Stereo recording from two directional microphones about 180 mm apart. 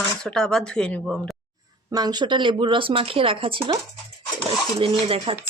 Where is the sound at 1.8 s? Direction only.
20° right (ahead or behind).